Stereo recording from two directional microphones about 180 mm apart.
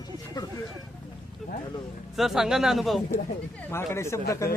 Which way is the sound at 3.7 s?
15° left (ahead or behind).